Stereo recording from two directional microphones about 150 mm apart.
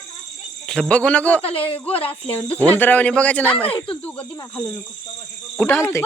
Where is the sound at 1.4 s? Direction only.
40° left (ahead or behind).